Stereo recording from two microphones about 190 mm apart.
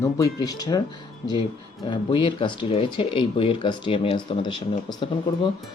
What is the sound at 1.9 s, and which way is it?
Speech, 25° left (ahead or behind).